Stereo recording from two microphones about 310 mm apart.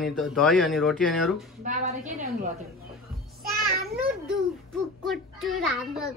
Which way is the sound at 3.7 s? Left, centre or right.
Right.